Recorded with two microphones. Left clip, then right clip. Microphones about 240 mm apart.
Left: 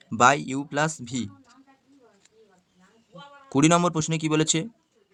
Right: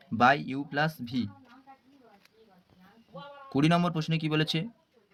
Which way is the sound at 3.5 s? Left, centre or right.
Left.